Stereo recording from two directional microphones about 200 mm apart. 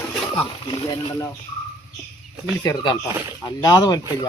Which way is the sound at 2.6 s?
20° left (ahead or behind).